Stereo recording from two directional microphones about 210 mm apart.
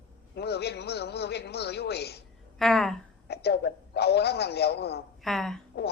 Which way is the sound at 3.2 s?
50° left (ahead or behind).